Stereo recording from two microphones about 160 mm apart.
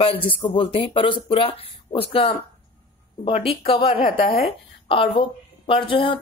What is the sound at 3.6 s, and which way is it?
A woman's voice, 35° left (ahead or behind).